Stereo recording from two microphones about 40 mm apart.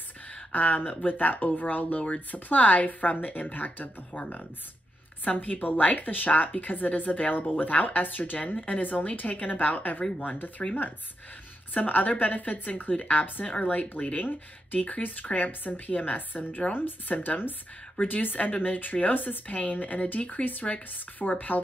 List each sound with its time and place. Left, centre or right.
0.5 s speech: left
4.1 s speech: left
10.6 s speech: left
11.7 s speech: left